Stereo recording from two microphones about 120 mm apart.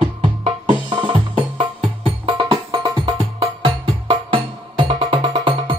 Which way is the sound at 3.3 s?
45° right (ahead or behind).